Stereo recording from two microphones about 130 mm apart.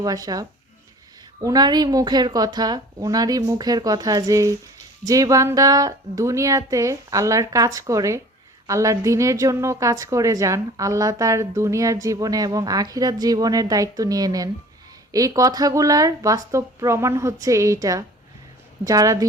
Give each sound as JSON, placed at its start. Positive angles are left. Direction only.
{"t": 0.0, "sound": "a woman's voice", "side_deg": -30}